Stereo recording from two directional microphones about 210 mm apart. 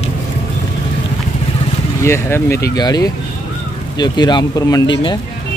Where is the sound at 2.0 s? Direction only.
10° left (ahead or behind).